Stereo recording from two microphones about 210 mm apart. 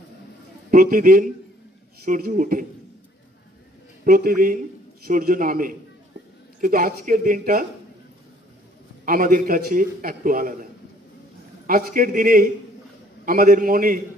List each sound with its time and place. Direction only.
0.7 s a man's voice: 40° right (ahead or behind)
4.0 s a man's voice: 45° right (ahead or behind)
9.0 s a man's voice: 40° right (ahead or behind)